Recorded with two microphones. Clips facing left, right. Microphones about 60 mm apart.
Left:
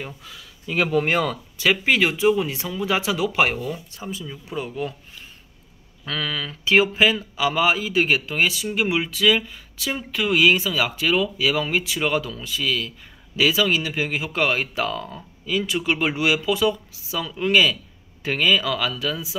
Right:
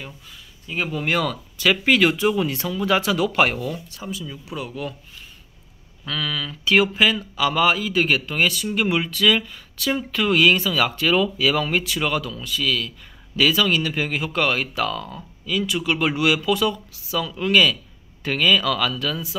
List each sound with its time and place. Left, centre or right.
0.2 s speech: left
1.0 s speech: left
3.9 s speech: left
6.0 s speech: left